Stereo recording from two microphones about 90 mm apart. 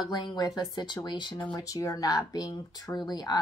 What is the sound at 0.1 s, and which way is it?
Speech, 55° left (ahead or behind).